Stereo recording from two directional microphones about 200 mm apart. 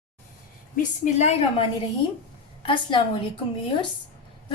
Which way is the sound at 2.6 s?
25° left (ahead or behind).